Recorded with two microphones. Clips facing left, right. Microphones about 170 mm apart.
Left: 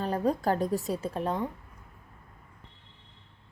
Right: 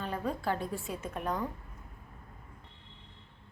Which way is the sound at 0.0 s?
40° left (ahead or behind).